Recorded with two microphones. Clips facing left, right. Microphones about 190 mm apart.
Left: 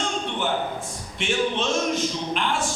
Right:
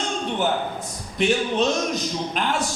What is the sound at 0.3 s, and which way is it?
A man's voice, 40° right (ahead or behind).